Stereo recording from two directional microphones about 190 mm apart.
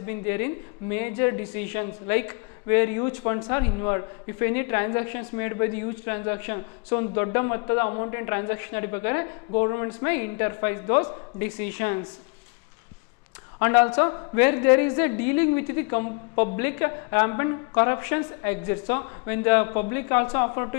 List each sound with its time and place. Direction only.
0.0 s a woman's voice: 15° left (ahead or behind)
13.6 s a woman's voice: 15° left (ahead or behind)